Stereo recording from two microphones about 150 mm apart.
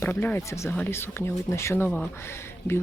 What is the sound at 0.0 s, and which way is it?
Speech, 15° left (ahead or behind).